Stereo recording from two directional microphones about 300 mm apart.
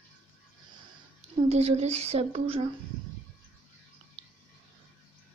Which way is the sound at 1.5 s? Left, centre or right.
Right.